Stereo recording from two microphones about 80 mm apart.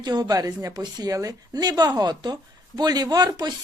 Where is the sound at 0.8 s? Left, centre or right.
Right.